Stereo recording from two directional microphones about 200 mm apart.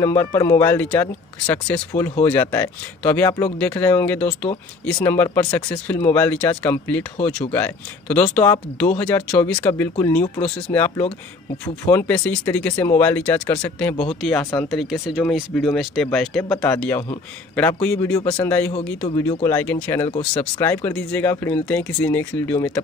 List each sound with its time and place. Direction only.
0.0 s speech: 15° left (ahead or behind)